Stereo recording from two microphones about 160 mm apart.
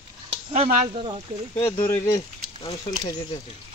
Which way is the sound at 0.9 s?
35° right (ahead or behind).